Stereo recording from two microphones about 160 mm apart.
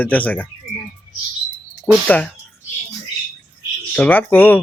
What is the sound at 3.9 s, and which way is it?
Speech, 10° left (ahead or behind).